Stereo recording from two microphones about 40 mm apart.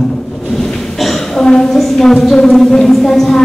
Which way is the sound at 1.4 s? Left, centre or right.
Centre.